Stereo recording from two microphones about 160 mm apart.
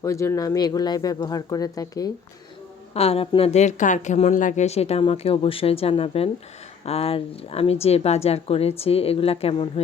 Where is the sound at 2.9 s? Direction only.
40° left (ahead or behind).